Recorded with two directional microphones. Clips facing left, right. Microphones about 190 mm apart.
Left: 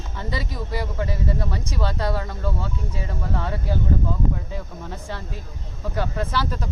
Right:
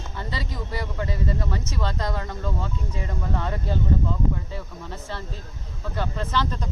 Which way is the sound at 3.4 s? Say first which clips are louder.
Left 2 dB; 10° left (ahead or behind).